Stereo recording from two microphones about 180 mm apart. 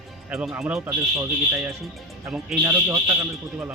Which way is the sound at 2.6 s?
20° right (ahead or behind).